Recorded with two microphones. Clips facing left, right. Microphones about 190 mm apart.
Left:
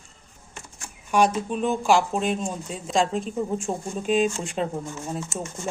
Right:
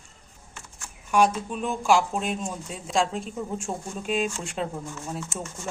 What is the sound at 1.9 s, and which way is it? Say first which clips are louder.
Speech: even; 5° right (ahead or behind).